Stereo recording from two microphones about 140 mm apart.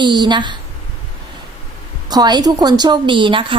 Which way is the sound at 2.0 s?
30° right (ahead or behind).